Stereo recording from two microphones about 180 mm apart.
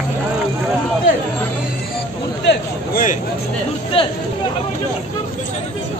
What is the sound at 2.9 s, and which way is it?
Speech, 45° left (ahead or behind).